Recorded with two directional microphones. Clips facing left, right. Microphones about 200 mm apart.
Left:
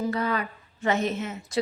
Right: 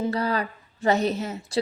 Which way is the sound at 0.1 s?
35° right (ahead or behind).